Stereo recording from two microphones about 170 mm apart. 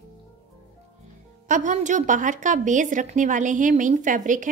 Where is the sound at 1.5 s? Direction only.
45° right (ahead or behind).